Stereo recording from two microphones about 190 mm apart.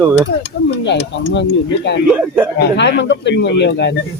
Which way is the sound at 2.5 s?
65° left (ahead or behind).